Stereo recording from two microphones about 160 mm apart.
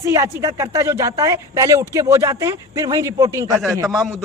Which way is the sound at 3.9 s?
Centre (ahead or behind).